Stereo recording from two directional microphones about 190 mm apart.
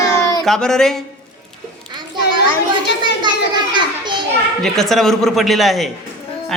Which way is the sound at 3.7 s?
25° right (ahead or behind).